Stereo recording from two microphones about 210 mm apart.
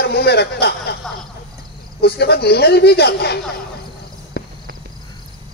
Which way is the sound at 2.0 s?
50° left (ahead or behind).